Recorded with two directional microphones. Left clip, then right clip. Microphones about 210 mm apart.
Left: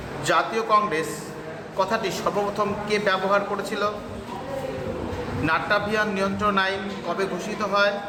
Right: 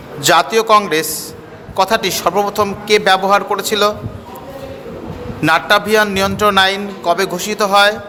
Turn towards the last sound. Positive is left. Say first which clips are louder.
# right 11 dB
turn(degrees=-55)  # may be behind; listen again after turning